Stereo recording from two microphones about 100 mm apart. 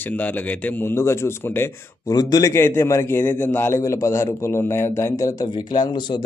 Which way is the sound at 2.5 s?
25° left (ahead or behind).